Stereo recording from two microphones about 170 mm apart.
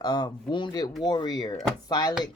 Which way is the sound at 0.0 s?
25° left (ahead or behind).